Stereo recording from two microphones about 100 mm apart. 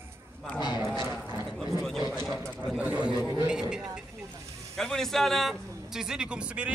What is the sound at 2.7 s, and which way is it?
Speech, 15° right (ahead or behind).